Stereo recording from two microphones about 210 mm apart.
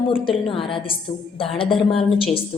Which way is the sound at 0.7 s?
25° left (ahead or behind).